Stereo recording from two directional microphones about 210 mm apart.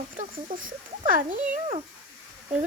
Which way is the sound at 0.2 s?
40° right (ahead or behind).